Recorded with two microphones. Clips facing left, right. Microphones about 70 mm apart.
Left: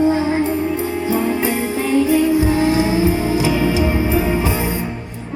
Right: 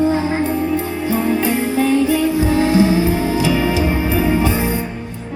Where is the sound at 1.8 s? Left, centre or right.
Left.